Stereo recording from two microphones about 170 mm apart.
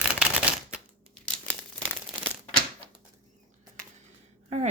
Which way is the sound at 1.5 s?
5° left (ahead or behind).